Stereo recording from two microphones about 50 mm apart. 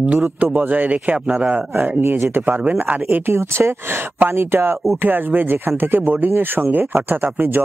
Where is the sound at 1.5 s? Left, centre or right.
Right.